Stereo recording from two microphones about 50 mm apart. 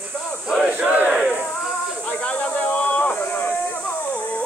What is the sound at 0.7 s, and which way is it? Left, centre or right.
Battle cry, right.